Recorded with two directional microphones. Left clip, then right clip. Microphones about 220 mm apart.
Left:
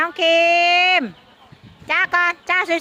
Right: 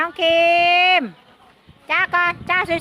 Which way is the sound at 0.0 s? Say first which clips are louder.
Even; 10° left (ahead or behind).